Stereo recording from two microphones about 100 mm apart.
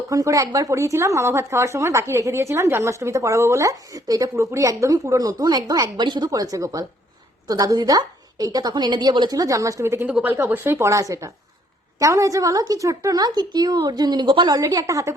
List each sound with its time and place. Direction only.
0.1 s a woman's voice: 35° right (ahead or behind)